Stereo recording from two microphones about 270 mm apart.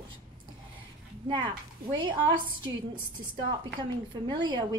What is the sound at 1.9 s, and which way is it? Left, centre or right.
Speech, centre.